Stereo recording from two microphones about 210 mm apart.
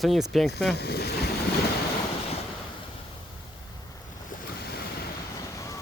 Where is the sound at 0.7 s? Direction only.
50° left (ahead or behind).